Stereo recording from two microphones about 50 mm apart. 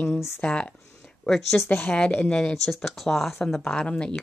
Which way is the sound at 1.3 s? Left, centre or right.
Centre.